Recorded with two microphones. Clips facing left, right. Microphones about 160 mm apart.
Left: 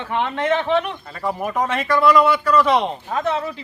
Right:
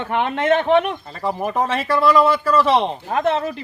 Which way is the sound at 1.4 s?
35° right (ahead or behind).